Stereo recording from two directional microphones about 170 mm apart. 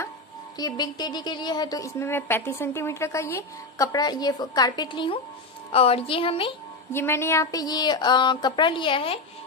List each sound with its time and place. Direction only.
0.6 s a woman's voice: 25° left (ahead or behind)
6.9 s a woman's voice: 15° left (ahead or behind); by 9.2 s 30° left (ahead or behind)